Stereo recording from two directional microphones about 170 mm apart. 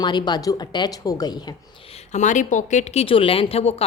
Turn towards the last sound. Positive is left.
turn(degrees=35)  # may be behind; listen again after turning